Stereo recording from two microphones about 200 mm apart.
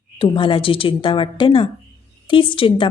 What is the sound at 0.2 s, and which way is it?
A woman's voice, 25° left (ahead or behind).